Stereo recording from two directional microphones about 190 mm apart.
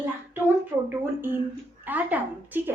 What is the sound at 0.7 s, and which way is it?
A woman's voice, 20° right (ahead or behind).